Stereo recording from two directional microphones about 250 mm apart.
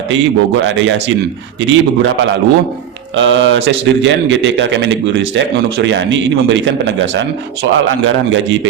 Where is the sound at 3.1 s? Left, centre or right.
Right.